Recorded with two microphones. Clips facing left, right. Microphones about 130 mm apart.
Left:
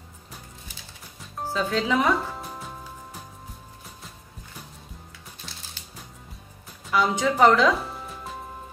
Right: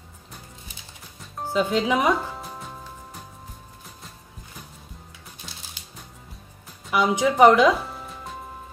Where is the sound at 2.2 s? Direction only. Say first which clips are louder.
Even; centre (ahead or behind).